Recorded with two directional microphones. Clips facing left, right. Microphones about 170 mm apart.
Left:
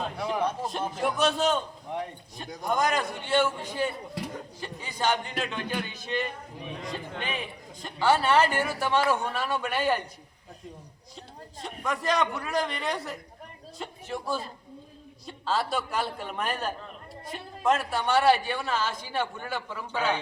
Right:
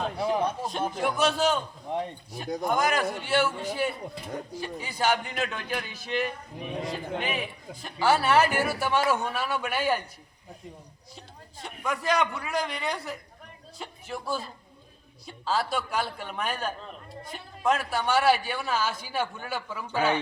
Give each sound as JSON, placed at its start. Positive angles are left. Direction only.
{"t": 0.2, "sound": "a sound", "side_deg": -25}
{"t": 0.6, "sound": "a man's voice", "side_deg": 0}
{"t": 11.6, "sound": "speech", "side_deg": 0}